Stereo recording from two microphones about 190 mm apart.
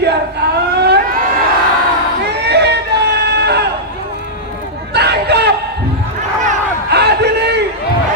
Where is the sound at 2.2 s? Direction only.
60° right (ahead or behind).